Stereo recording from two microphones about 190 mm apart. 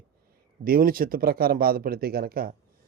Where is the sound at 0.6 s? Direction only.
50° right (ahead or behind).